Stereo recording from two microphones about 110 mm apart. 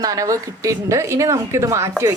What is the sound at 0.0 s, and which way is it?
Speech, 35° right (ahead or behind).